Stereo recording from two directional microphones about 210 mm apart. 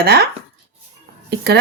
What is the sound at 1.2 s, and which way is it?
Speech, 50° right (ahead or behind).